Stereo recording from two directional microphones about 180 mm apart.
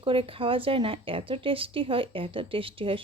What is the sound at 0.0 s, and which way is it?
A woman's voice, 30° right (ahead or behind).